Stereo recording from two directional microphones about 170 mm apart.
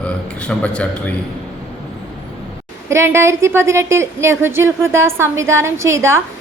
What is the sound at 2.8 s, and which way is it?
A woman's voice, 15° right (ahead or behind).